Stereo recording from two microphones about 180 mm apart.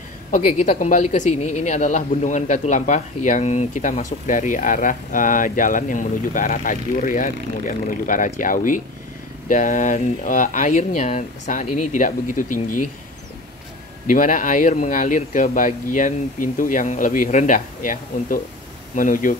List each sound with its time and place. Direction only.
0.3 s speech: 45° left (ahead or behind)
14.0 s speech: 50° left (ahead or behind)